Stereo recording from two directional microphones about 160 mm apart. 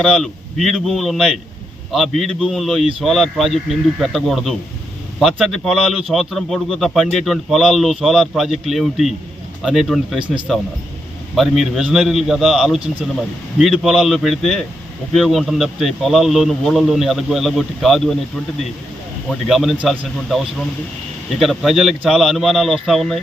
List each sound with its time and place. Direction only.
0.0 s a man's voice: centre (ahead or behind)
11.3 s a man's voice: centre (ahead or behind)
19.3 s a man's voice: centre (ahead or behind)